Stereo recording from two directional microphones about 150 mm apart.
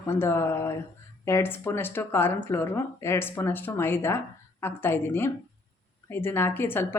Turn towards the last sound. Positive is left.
turn(degrees=15)  # may be behind; listen again after turning